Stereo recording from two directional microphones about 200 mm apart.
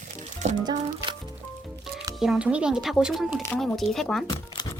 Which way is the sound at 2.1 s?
5° right (ahead or behind).